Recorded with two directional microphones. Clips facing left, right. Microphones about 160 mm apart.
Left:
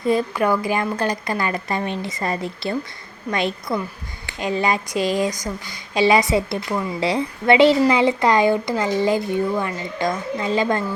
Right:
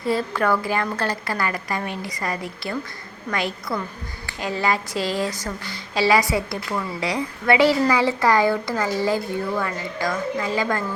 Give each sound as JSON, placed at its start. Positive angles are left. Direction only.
{"t": 0.1, "sound": "a woman's voice", "side_deg": 15}